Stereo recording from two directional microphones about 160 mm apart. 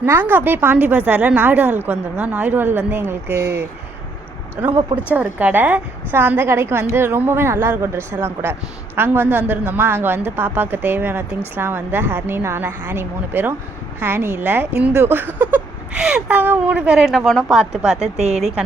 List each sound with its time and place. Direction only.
0.0 s speech: 15° right (ahead or behind)
5.0 s speech: 10° right (ahead or behind)
18.0 s speech: 45° right (ahead or behind)